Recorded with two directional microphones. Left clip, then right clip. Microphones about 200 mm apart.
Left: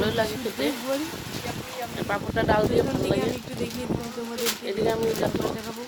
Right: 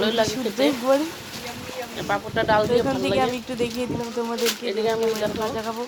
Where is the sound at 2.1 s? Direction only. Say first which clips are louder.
Right 3 dB; 15° left (ahead or behind).